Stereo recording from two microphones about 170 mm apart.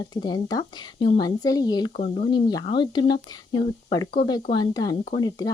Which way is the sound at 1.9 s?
50° left (ahead or behind).